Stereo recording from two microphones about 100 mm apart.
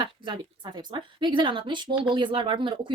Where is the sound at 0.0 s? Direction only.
50° right (ahead or behind).